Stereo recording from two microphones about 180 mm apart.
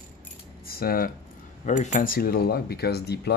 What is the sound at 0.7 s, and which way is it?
Speech, 55° left (ahead or behind).